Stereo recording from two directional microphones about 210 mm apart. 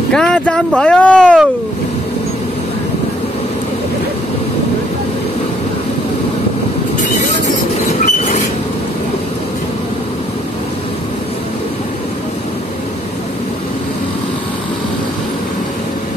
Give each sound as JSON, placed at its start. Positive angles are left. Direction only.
{"t": 0.1, "sound": "speech", "side_deg": 5}
{"t": 7.4, "sound": "train", "side_deg": 35}